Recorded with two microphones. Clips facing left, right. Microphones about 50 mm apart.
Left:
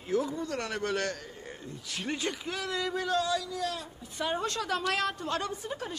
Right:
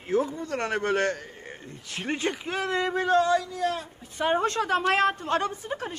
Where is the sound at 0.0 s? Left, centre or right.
Right.